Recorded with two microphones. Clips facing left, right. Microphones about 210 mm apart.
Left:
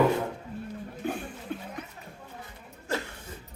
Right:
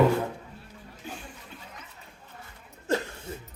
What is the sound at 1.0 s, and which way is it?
Chuckle, 55° left (ahead or behind).